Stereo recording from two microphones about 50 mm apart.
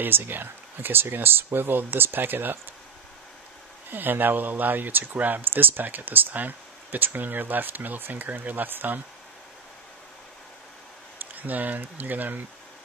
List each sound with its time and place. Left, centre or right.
0.0 s speech: right
3.9 s speech: right
11.3 s speech: right